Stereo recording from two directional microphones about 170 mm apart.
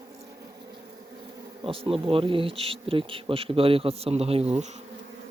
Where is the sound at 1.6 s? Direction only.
35° right (ahead or behind).